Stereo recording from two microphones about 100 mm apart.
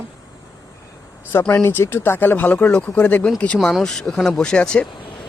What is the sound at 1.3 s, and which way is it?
Speech, 20° left (ahead or behind).